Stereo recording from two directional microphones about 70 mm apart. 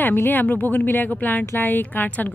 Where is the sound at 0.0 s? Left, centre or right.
Left.